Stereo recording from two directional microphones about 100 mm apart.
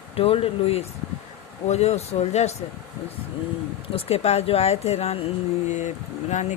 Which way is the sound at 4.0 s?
90° left.